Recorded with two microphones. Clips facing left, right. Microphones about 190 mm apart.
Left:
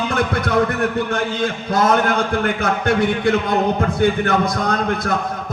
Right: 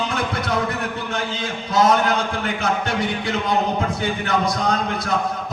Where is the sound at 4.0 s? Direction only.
55° left (ahead or behind).